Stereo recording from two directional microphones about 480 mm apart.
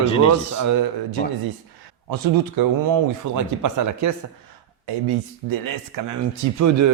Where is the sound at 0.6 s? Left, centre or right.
Right.